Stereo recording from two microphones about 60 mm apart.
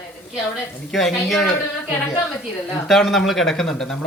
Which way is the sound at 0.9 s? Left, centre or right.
Centre.